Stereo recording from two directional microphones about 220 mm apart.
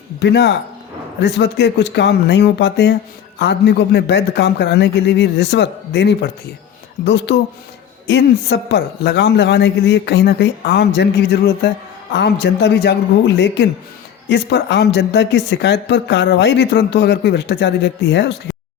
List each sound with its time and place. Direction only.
0.2 s speech: 50° left (ahead or behind)